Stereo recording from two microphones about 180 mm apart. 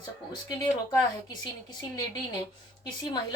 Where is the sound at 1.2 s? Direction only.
20° left (ahead or behind).